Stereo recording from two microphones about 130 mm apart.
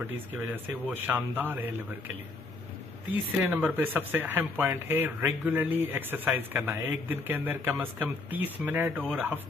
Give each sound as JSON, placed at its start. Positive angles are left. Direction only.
{"t": 0.0, "sound": "speech", "side_deg": -15}
{"t": 3.3, "sound": "speech", "side_deg": -15}